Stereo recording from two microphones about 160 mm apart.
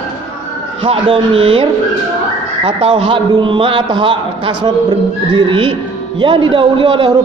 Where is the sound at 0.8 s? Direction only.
35° right (ahead or behind).